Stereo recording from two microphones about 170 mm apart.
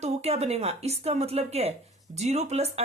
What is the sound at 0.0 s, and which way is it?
Speech, 40° right (ahead or behind).